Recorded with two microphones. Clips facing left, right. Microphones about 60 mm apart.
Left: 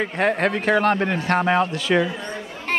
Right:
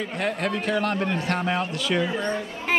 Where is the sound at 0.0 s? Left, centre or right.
Left.